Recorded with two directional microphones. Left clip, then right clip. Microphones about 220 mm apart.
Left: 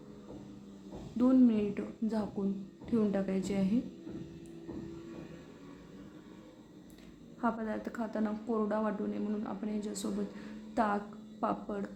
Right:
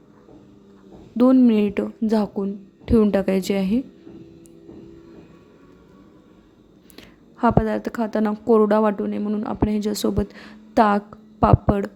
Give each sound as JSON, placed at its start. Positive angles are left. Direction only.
{"t": 1.1, "sound": "a woman's voice", "side_deg": -45}
{"t": 6.9, "sound": "a woman's voice", "side_deg": -45}